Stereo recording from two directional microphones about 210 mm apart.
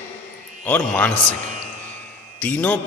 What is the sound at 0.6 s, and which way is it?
Speech, 10° left (ahead or behind).